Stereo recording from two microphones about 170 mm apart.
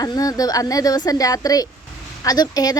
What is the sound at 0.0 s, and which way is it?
A woman's voice, 20° left (ahead or behind).